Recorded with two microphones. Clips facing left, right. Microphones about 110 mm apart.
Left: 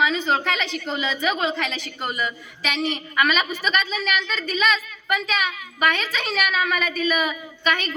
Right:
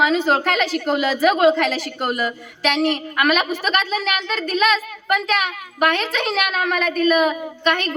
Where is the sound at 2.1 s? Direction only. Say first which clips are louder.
Right 4 dB; 65° right (ahead or behind).